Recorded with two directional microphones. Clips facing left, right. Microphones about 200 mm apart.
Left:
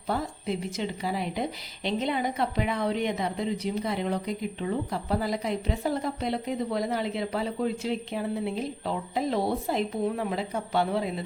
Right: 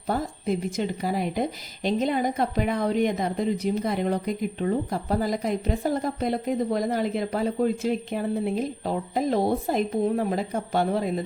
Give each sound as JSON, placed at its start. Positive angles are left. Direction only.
{"t": 0.1, "sound": "a woman's voice", "side_deg": -45}